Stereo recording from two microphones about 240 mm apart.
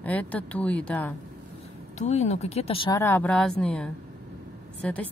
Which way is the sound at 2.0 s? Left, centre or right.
Left.